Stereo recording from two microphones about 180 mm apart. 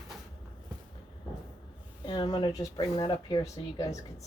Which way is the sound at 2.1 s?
20° left (ahead or behind).